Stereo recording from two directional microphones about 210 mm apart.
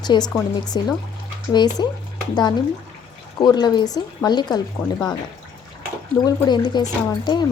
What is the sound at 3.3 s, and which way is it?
Speech, 20° left (ahead or behind).